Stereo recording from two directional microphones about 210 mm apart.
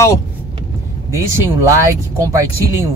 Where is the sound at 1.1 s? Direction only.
15° right (ahead or behind).